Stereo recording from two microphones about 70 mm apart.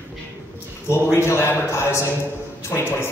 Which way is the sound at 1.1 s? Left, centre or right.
Left.